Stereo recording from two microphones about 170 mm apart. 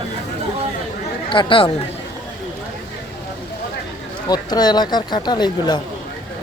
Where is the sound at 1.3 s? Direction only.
30° left (ahead or behind).